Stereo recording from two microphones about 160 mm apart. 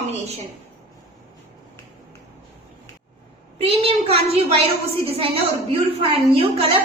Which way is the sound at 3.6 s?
40° right (ahead or behind).